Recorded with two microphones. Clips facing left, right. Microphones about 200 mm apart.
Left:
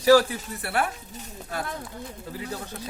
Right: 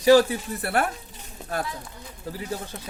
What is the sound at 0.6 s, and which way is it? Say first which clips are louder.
Speech: right 2 dB; 45° right (ahead or behind).